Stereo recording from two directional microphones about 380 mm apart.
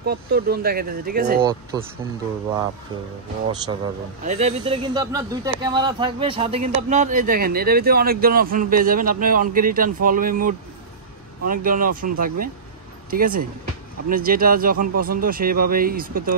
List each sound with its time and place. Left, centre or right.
0.0 s speech: right
1.4 s speech: centre
3.6 s speech: centre